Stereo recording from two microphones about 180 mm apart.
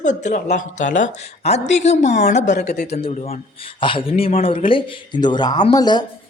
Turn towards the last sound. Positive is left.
turn(degrees=20)  # may be behind; listen again after turning